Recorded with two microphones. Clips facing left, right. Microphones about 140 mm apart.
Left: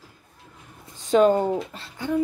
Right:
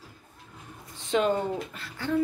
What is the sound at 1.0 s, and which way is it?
Speech, 40° left (ahead or behind).